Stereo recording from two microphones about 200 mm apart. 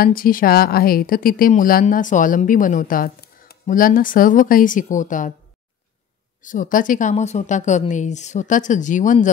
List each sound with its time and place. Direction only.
0.0 s a woman's voice: 45° left (ahead or behind)
6.4 s a woman's voice: 40° left (ahead or behind)